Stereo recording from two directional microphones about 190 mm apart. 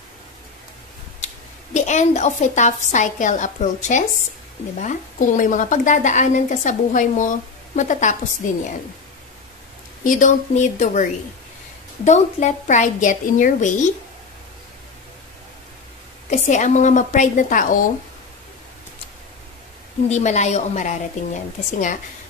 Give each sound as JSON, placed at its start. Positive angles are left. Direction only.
{"t": 1.2, "sound": "a woman's voice", "side_deg": 40}
{"t": 10.0, "sound": "a woman's voice", "side_deg": 40}
{"t": 16.3, "sound": "a woman's voice", "side_deg": 40}
{"t": 20.1, "sound": "a woman's voice", "side_deg": 35}